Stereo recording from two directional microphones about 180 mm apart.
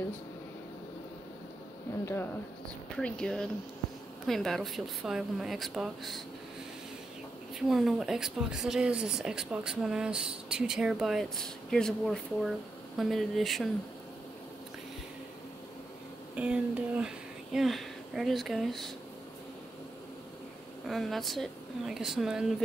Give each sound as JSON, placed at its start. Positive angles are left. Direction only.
{"t": 3.0, "sound": "speech", "side_deg": 5}
{"t": 7.5, "sound": "speech", "side_deg": 0}
{"t": 16.3, "sound": "speech", "side_deg": -5}
{"t": 20.8, "sound": "speech", "side_deg": 0}